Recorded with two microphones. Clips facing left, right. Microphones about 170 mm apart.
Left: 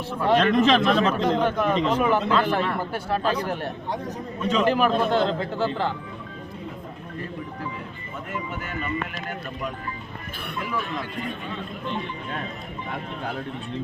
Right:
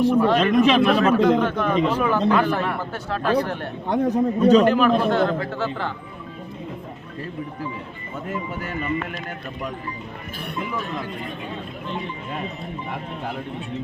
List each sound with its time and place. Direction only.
0.0 s speech: 15° right (ahead or behind)
1.5 s a man's voice: 5° left (ahead or behind)
1.7 s speech: 5° right (ahead or behind)
2.0 s a man's voice: 10° left (ahead or behind)
2.3 s speech: 15° right (ahead or behind)
2.6 s a man's voice: 10° left (ahead or behind)
4.1 s a man's voice: 35° right (ahead or behind)
4.8 s a man's voice: 20° left (ahead or behind)